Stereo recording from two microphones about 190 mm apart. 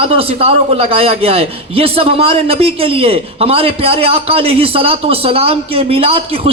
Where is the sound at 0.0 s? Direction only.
30° right (ahead or behind).